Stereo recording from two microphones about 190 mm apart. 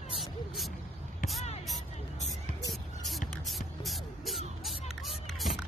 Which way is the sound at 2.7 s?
Centre (ahead or behind).